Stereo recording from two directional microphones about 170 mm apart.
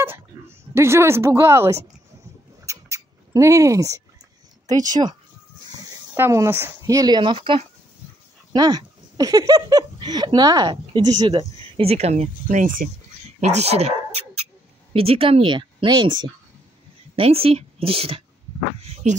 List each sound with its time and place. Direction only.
0.0 s speech: 15° right (ahead or behind)
2.6 s a sound: 15° right (ahead or behind)
4.6 s speech: 25° right (ahead or behind)
6.1 s speech: 15° right (ahead or behind); by 12.9 s 50° right (ahead or behind)
13.4 s a woman's voice: 40° right (ahead or behind)